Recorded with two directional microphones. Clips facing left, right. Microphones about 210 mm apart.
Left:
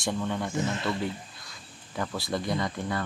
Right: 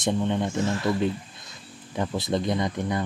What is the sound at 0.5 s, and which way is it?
Speech, 20° left (ahead or behind).